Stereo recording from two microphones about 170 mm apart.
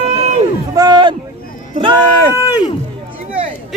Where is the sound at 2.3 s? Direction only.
15° right (ahead or behind).